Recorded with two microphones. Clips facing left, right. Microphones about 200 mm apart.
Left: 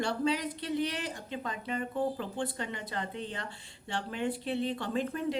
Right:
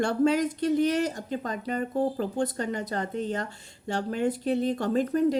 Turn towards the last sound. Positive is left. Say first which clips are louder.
# right 8 dB
turn(degrees=-40)  # may be behind; listen again after turning